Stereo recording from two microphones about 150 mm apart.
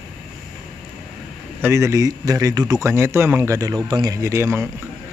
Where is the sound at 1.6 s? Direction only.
20° right (ahead or behind).